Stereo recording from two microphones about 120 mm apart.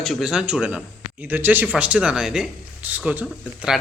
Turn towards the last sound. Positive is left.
turn(degrees=-10)  # may be behind; listen again after turning